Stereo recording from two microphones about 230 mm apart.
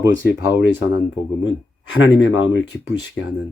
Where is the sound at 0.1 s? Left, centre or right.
Left.